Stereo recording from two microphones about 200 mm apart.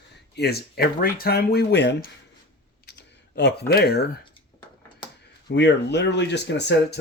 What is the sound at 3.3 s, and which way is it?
Speech, 55° left (ahead or behind).